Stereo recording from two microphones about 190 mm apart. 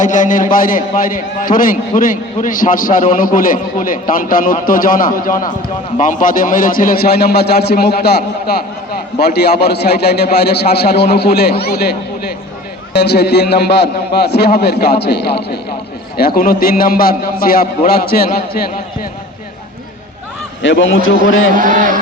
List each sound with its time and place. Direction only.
0.0 s a man's voice: 40° left (ahead or behind)
9.1 s a man's voice: 60° left (ahead or behind)
20.6 s a man's voice: 80° left
21.5 s a man's voice: 45° right (ahead or behind)